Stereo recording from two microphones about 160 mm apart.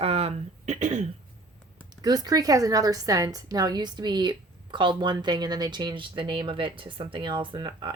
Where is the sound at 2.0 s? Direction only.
25° right (ahead or behind).